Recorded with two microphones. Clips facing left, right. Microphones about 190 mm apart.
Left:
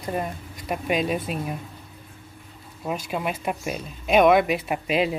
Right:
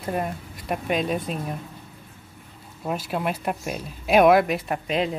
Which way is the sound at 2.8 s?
Centre (ahead or behind).